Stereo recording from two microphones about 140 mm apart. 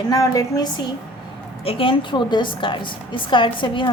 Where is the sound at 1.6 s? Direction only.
40° left (ahead or behind).